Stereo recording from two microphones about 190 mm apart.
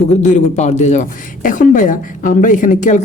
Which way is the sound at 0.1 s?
40° left (ahead or behind).